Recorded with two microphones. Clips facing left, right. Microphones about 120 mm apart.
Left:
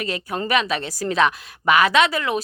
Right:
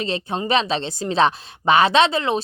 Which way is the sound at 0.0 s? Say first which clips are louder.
Right 2 dB; 25° right (ahead or behind).